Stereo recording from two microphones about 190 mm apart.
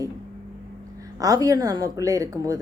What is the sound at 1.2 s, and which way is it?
A woman's voice, 20° right (ahead or behind).